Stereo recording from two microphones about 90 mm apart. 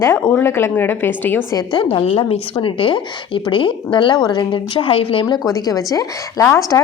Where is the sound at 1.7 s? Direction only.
75° left (ahead or behind).